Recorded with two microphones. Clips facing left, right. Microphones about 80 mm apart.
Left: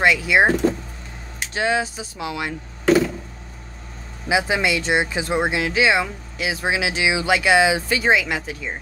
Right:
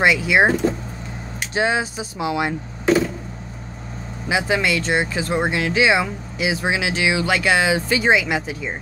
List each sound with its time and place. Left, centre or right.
0.0 s speech: centre
1.5 s speech: centre
4.3 s speech: centre